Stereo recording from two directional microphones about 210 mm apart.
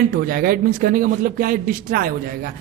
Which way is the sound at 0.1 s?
45° right (ahead or behind).